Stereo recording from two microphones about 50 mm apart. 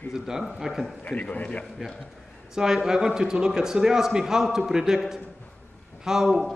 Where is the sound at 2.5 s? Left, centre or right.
Centre.